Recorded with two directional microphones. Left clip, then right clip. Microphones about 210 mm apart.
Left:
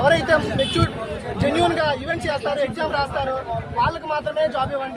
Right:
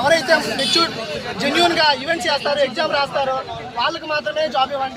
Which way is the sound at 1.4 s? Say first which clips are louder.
Right 4 dB; centre (ahead or behind).